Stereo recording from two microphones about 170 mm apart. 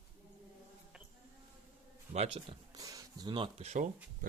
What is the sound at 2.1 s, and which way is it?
Speech, 35° right (ahead or behind).